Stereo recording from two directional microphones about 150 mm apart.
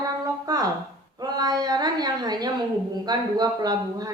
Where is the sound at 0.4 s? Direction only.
25° right (ahead or behind).